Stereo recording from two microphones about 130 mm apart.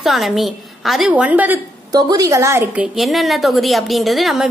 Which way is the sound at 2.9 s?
Centre (ahead or behind).